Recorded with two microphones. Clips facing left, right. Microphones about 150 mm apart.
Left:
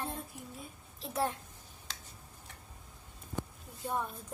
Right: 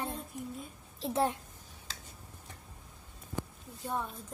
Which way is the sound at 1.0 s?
25° right (ahead or behind).